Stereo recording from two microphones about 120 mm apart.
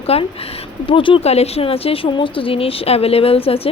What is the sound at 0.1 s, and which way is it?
Speech, 55° left (ahead or behind).